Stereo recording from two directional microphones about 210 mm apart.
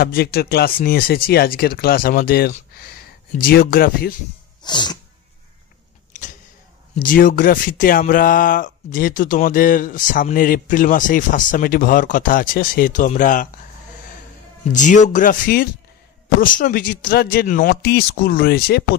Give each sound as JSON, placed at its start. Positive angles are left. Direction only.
{"t": 0.0, "sound": "speech", "side_deg": 50}
{"t": 4.6, "sound": "sneeze", "side_deg": 20}
{"t": 7.0, "sound": "speech", "side_deg": 40}
{"t": 14.7, "sound": "speech", "side_deg": 35}